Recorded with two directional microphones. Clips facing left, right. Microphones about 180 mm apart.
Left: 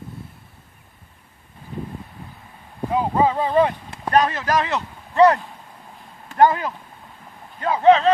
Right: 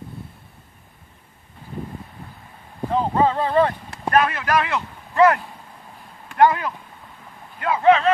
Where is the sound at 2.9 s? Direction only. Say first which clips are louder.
Even; 10° left (ahead or behind).